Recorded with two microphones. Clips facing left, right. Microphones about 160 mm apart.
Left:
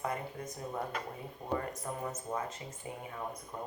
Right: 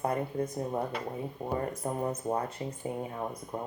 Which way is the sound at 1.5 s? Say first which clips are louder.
Right 4 dB; 30° right (ahead or behind).